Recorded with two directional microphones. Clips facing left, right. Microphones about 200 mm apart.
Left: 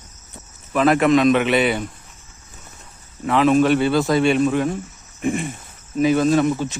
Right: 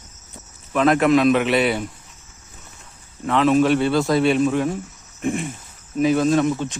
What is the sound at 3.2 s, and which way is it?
Speech, 5° left (ahead or behind).